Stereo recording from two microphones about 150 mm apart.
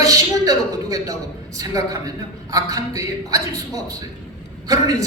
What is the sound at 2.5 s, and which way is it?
A woman's voice, 25° right (ahead or behind).